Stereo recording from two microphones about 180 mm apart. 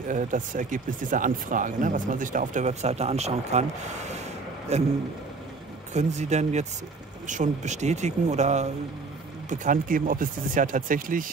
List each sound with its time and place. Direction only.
0.1 s speech: 45° right (ahead or behind)
4.7 s speech: 35° right (ahead or behind)
5.9 s speech: 40° right (ahead or behind)